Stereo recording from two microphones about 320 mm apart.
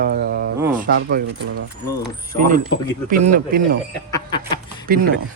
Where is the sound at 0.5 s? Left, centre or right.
Centre.